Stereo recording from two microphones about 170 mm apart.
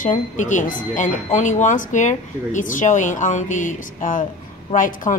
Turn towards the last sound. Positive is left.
turn(degrees=50)  # may be behind; listen again after turning